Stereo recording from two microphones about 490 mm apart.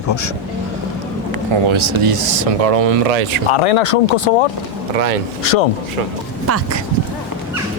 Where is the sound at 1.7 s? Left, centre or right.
Right.